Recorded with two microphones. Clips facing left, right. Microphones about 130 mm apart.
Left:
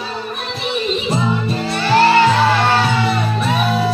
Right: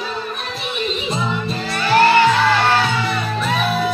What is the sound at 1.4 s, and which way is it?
Music, 25° left (ahead or behind).